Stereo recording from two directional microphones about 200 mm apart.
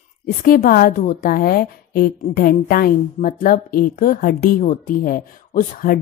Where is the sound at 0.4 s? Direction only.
45° left (ahead or behind).